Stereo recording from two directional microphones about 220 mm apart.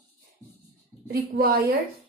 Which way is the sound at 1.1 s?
40° right (ahead or behind).